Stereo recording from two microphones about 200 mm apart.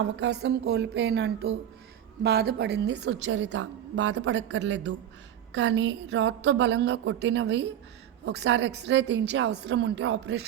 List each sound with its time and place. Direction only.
0.0 s a woman's voice: 55° right (ahead or behind)